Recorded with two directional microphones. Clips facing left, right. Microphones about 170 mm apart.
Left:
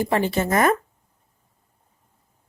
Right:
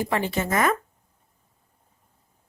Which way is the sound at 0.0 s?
35° left (ahead or behind).